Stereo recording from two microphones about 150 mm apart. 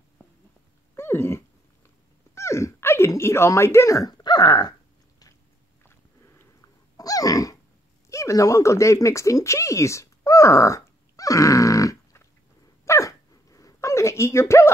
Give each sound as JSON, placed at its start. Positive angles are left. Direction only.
{"t": 0.9, "sound": "dog", "side_deg": 15}
{"t": 5.9, "sound": "a sound", "side_deg": 15}
{"t": 8.1, "sound": "speech", "side_deg": 20}
{"t": 12.8, "sound": "dog", "side_deg": 20}